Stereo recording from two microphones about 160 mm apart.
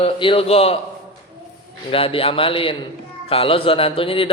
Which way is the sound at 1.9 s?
35° left (ahead or behind).